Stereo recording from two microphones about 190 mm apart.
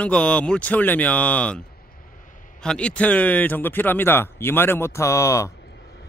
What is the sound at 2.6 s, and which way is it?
Speech, 5° left (ahead or behind).